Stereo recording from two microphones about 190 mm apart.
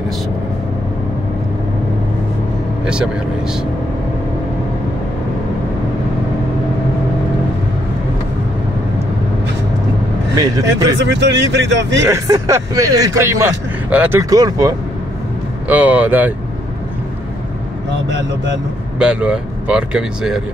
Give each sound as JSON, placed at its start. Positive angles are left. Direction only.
{"t": 10.3, "sound": "speech", "side_deg": -20}
{"t": 11.0, "sound": "speech", "side_deg": -65}
{"t": 12.1, "sound": "speech", "side_deg": -15}
{"t": 15.7, "sound": "speech", "side_deg": -5}
{"t": 18.9, "sound": "speech", "side_deg": -5}